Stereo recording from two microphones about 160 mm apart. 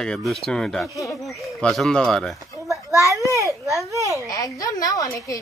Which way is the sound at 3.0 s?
20° right (ahead or behind).